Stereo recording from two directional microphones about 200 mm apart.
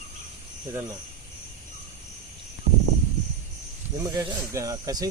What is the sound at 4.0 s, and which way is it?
Speech, 15° right (ahead or behind).